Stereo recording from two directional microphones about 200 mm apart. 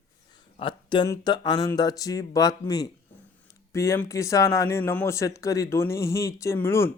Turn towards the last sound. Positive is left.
turn(degrees=10)  # may be behind; listen again after turning